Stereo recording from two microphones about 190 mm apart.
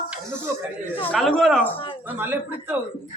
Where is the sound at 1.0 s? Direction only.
5° left (ahead or behind).